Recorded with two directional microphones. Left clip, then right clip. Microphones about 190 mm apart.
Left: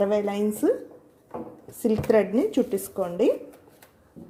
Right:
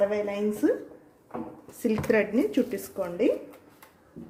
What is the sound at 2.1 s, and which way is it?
A woman's voice, 15° left (ahead or behind).